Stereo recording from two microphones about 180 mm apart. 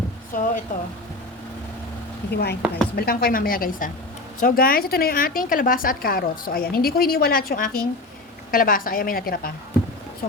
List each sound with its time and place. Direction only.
0.3 s a woman's voice: 45° left (ahead or behind)
2.3 s a woman's voice: 65° left (ahead or behind)